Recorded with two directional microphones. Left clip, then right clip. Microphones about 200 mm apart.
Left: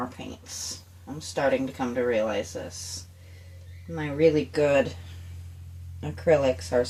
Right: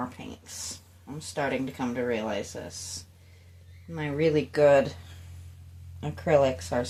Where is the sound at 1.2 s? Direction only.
30° right (ahead or behind).